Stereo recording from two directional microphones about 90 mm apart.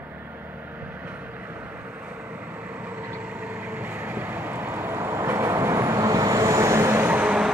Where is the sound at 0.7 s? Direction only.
20° right (ahead or behind).